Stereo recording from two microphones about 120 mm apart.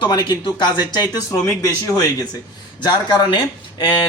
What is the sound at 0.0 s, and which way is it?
Speech, 35° left (ahead or behind).